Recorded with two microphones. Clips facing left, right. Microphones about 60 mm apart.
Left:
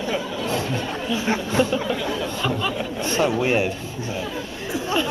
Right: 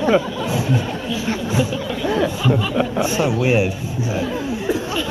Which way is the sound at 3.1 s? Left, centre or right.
Centre.